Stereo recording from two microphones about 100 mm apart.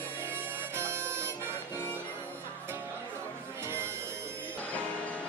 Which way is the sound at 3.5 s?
25° right (ahead or behind).